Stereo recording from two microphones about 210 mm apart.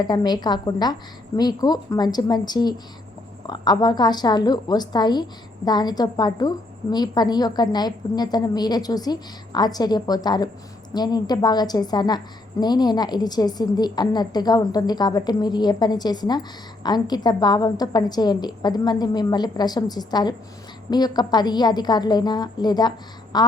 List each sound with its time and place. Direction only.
0.0 s a woman's voice: 20° left (ahead or behind)